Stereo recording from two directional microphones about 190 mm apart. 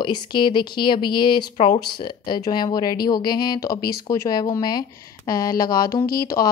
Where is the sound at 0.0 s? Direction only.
25° left (ahead or behind).